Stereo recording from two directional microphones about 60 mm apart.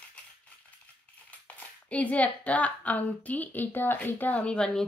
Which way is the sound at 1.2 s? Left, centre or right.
Left.